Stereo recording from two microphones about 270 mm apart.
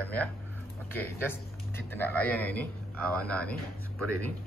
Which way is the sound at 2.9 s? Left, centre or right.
Right.